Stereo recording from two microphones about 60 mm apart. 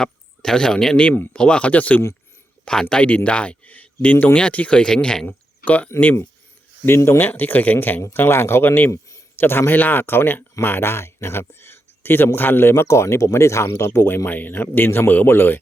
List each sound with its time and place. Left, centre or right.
0.0 s speech: centre
5.6 s speech: left
6.8 s a man's voice: left
8.9 s a sound: left
9.3 s a man's voice: left
14.3 s a man's voice: left